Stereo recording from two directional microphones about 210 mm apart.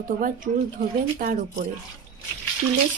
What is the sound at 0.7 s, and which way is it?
Speech, 40° right (ahead or behind).